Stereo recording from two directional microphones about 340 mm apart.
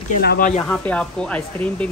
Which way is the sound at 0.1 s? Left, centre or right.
Left.